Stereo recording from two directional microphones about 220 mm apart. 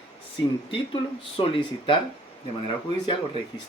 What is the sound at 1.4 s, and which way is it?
Speech, 25° left (ahead or behind).